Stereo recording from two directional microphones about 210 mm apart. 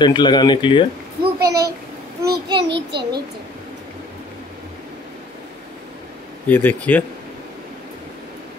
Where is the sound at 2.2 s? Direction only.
20° right (ahead or behind).